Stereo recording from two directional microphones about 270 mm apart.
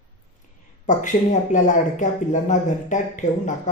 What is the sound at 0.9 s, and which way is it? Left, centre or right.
Speech, left.